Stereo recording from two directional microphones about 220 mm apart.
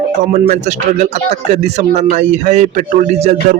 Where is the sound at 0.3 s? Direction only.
35° right (ahead or behind).